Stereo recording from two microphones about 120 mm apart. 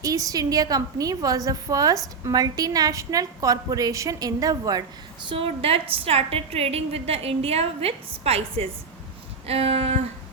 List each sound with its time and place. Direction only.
0.0 s a woman's voice: 30° right (ahead or behind)
5.3 s a woman's voice: 50° right (ahead or behind)